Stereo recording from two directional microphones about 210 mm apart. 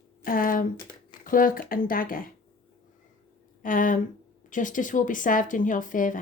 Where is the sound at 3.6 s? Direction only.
40° left (ahead or behind).